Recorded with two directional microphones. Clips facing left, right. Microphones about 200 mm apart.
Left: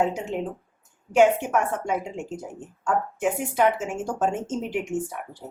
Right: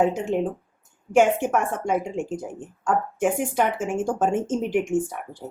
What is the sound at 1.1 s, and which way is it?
A woman's voice, 50° right (ahead or behind).